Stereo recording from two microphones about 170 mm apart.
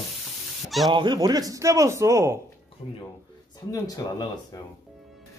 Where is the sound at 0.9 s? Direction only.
25° right (ahead or behind).